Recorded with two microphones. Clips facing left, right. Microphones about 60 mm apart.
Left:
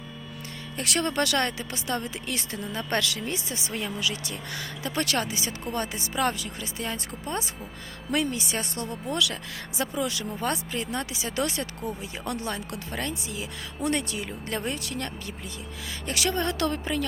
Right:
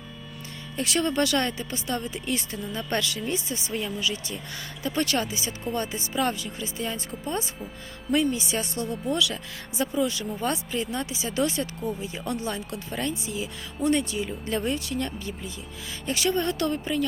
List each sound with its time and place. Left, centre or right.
0.8 s speech: left
10.4 s speech: left